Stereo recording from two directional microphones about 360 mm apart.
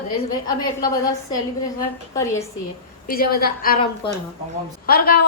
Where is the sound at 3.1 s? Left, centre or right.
Left.